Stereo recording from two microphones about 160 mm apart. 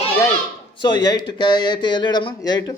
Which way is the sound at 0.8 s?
25° left (ahead or behind).